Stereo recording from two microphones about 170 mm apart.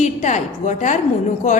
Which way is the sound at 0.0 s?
45° left (ahead or behind).